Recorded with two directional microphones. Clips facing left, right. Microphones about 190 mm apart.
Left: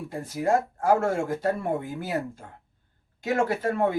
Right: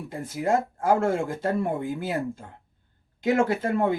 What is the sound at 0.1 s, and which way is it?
Speech, 25° right (ahead or behind).